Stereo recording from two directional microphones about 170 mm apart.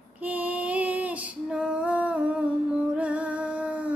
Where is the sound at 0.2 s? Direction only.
10° right (ahead or behind).